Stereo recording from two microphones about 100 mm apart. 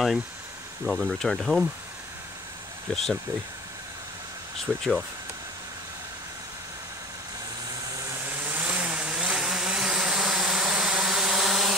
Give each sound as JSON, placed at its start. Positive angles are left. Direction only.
{"t": 0.8, "sound": "speech", "side_deg": 5}
{"t": 2.9, "sound": "speech", "side_deg": 5}
{"t": 4.6, "sound": "speech", "side_deg": 5}
{"t": 7.9, "sound": "vehicle", "side_deg": -35}
{"t": 8.3, "sound": "vehicle", "side_deg": -20}